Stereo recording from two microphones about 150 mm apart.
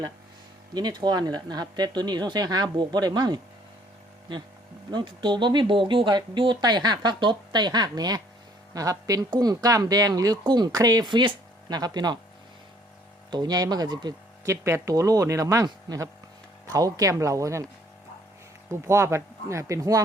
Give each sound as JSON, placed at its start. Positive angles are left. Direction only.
{"t": 0.7, "sound": "speech", "side_deg": -25}
{"t": 4.9, "sound": "speech", "side_deg": -30}
{"t": 13.3, "sound": "speech", "side_deg": -25}
{"t": 18.7, "sound": "speech", "side_deg": -20}